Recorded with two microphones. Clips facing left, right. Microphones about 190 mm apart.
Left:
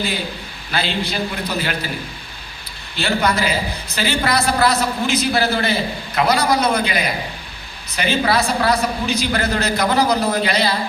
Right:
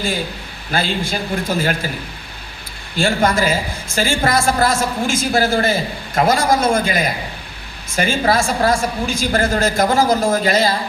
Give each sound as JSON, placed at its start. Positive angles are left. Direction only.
{"t": 0.7, "sound": "a woman's voice", "side_deg": -45}
{"t": 2.9, "sound": "a woman's voice", "side_deg": -50}